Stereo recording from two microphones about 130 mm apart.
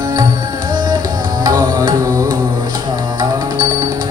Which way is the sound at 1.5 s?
30° right (ahead or behind).